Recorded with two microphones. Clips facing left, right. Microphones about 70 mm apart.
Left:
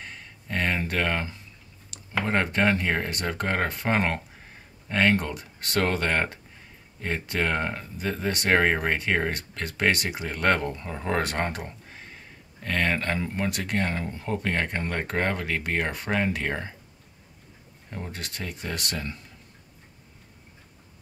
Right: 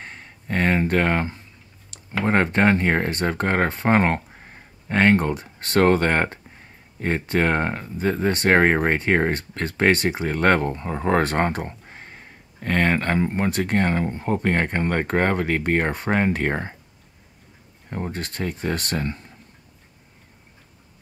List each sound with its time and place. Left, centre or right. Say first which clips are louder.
0.0 s a sound: right 3 dB; right
2.2 s speech: right 6 dB; right
17.8 s speech: right 7 dB; right